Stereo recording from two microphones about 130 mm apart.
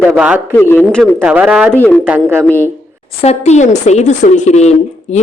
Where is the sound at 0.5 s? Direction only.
15° left (ahead or behind).